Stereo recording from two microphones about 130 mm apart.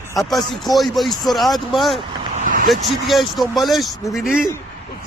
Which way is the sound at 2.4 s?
90° right.